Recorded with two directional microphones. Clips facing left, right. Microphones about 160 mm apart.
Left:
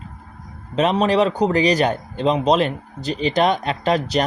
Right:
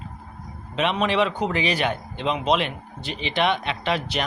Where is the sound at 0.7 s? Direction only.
40° left (ahead or behind).